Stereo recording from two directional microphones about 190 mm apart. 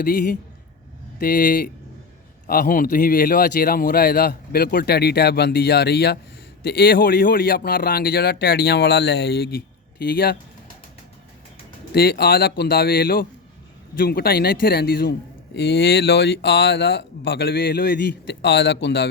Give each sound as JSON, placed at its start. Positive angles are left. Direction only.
{"t": 0.0, "sound": "a man's voice", "side_deg": 45}
{"t": 11.9, "sound": "a man's voice", "side_deg": 55}